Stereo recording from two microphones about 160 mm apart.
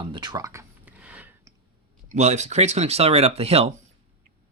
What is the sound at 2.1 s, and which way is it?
Speech, 45° right (ahead or behind).